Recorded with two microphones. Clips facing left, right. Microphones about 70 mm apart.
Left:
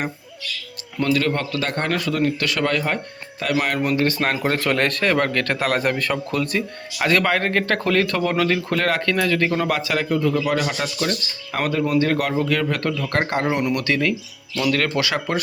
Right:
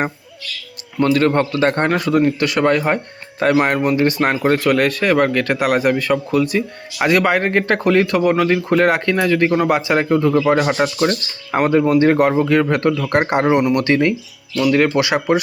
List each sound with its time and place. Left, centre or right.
0.9 s speech: right
3.8 s speech: centre
4.4 s a man's voice: centre